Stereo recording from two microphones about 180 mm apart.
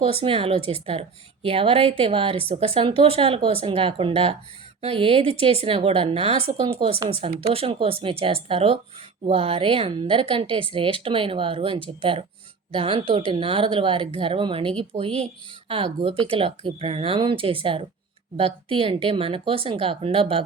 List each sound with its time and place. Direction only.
0.0 s a woman's voice: 30° right (ahead or behind)